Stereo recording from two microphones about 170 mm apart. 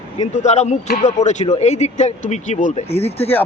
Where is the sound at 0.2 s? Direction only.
40° left (ahead or behind).